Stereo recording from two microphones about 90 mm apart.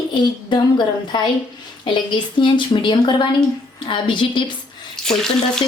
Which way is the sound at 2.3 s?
65° left (ahead or behind).